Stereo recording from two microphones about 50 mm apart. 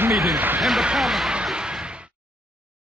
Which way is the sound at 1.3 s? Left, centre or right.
Centre.